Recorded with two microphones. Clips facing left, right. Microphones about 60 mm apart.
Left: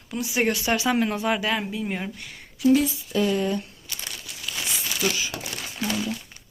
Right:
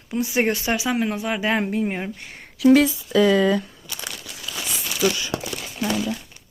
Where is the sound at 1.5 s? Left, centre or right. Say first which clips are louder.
Right 6 dB; right.